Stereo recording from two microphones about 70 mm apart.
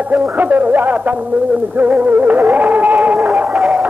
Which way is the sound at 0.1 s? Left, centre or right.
Right.